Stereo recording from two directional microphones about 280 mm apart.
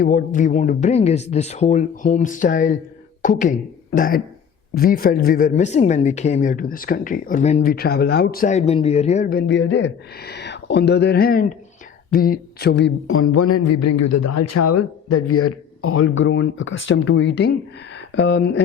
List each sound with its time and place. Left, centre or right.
0.0 s speech: left